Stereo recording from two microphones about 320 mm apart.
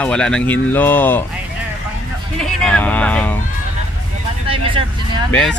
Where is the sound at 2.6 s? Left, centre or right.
Centre.